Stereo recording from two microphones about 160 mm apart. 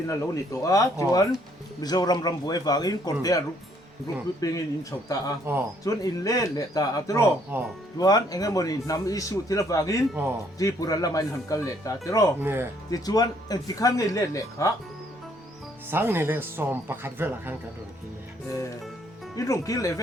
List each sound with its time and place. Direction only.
0.1 s a man's voice: 20° left (ahead or behind)
12.4 s speech: 15° right (ahead or behind)
12.9 s a man's voice: 25° left (ahead or behind)
15.9 s speech: 15° right (ahead or behind)
19.4 s a man's voice: 20° left (ahead or behind)